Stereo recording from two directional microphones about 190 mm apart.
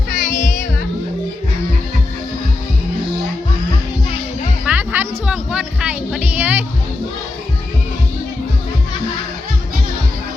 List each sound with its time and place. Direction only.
0.1 s music: 45° left (ahead or behind)
4.6 s music: 10° right (ahead or behind)